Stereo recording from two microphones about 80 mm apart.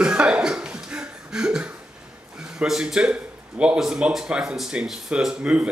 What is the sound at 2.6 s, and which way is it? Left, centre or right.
Speech, centre.